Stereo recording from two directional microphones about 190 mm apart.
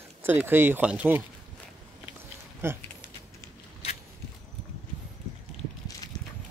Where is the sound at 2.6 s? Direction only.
10° right (ahead or behind).